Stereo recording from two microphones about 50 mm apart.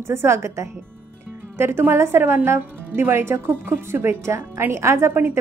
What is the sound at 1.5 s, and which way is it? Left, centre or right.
A woman's voice, right.